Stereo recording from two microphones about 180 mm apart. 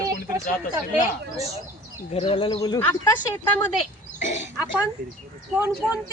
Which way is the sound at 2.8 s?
15° left (ahead or behind).